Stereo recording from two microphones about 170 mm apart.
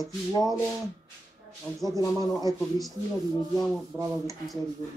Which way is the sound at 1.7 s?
20° left (ahead or behind).